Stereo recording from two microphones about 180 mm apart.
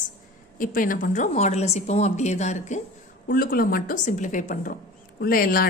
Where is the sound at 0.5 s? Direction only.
50° left (ahead or behind).